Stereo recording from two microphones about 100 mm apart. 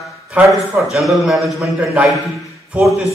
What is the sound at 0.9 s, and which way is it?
Speech, centre (ahead or behind).